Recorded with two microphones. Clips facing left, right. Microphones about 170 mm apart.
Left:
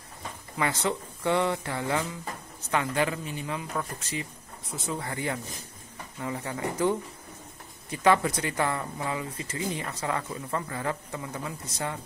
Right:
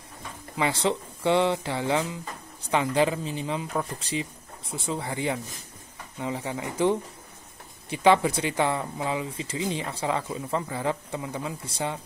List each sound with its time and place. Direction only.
0.6 s speech: 20° right (ahead or behind)